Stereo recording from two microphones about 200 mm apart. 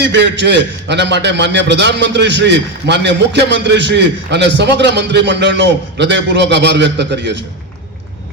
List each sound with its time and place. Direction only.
0.0 s a man's voice: 60° right (ahead or behind)